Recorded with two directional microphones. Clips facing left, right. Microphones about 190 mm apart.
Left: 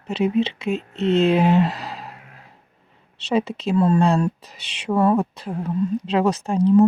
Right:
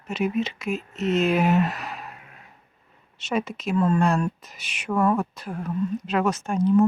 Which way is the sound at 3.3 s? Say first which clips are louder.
Left 4 dB; 30° left (ahead or behind).